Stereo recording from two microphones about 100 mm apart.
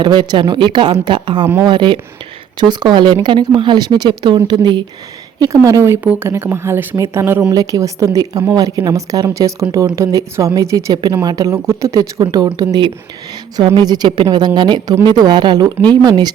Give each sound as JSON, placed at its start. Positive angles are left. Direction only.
{"t": 0.0, "sound": "a woman's voice", "side_deg": -50}
{"t": 5.4, "sound": "speech", "side_deg": -35}
{"t": 7.5, "sound": "speech", "side_deg": -40}
{"t": 11.9, "sound": "speech", "side_deg": -40}
{"t": 12.5, "sound": "speech", "side_deg": -50}